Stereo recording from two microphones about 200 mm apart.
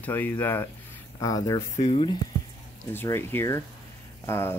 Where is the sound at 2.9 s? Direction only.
10° left (ahead or behind).